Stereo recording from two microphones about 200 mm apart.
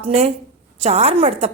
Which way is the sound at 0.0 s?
30° right (ahead or behind).